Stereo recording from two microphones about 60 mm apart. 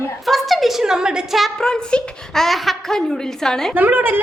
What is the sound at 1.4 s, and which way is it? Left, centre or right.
A woman's voice, centre.